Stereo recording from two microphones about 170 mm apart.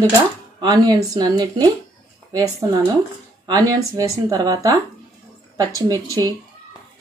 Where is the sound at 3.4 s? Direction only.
20° right (ahead or behind).